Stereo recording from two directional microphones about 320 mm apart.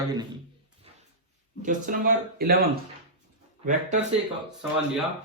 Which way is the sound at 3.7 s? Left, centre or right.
Right.